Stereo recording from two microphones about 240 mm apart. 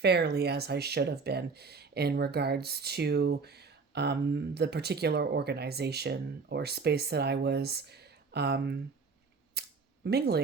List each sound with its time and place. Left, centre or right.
0.0 s speech: right
9.6 s camera: right